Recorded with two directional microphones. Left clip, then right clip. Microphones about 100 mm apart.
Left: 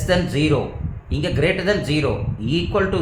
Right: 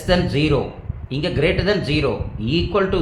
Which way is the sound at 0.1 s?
15° right (ahead or behind).